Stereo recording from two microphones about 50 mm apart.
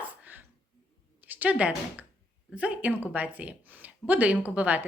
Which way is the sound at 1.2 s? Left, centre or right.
Right.